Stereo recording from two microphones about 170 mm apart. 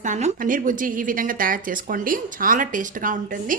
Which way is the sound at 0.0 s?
45° right (ahead or behind).